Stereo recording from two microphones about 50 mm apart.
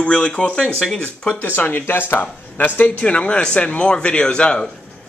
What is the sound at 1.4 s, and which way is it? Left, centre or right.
Speech, left.